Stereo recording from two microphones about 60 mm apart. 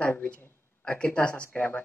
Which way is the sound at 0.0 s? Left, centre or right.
Left.